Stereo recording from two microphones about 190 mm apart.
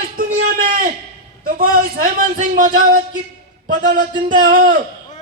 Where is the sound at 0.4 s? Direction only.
45° right (ahead or behind).